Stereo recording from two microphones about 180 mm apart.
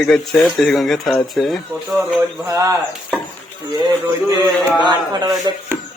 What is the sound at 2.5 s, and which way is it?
Speech, 15° right (ahead or behind).